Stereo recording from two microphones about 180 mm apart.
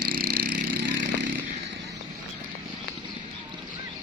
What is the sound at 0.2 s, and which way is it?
Vehicle, 55° right (ahead or behind).